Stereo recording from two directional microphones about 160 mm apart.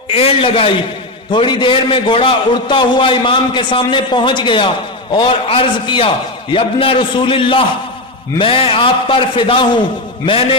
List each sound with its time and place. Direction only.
0.1 s a man's voice: 35° left (ahead or behind)